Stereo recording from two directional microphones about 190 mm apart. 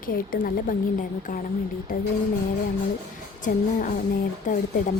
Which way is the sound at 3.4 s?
40° left (ahead or behind).